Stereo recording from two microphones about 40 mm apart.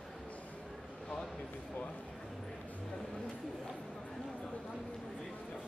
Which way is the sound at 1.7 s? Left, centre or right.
Left.